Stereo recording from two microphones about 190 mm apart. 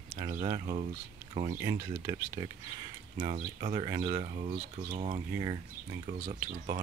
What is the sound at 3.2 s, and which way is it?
Speech, 30° right (ahead or behind).